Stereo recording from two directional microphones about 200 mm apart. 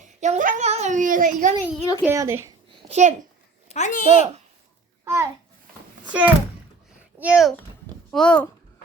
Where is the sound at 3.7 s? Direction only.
35° left (ahead or behind).